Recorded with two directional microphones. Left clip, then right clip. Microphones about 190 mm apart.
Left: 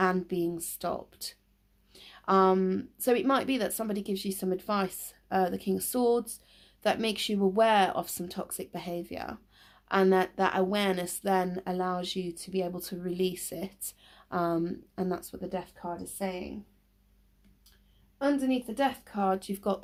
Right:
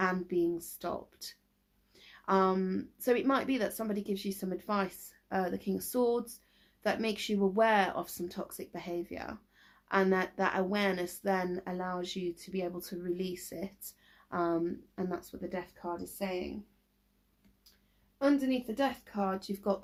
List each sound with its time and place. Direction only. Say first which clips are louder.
0.0 s speech: left 3 dB; 40° left (ahead or behind)
18.2 s speech: left 1 dB; 40° left (ahead or behind)